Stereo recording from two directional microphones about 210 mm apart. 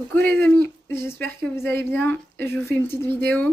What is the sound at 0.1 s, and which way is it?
Speech, 10° left (ahead or behind).